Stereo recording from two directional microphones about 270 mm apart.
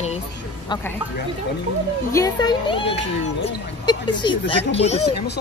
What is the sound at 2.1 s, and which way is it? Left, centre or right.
Speech, centre.